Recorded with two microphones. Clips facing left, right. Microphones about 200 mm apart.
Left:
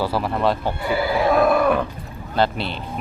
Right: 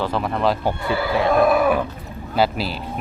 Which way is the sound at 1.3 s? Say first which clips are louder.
Right 1 dB; centre (ahead or behind).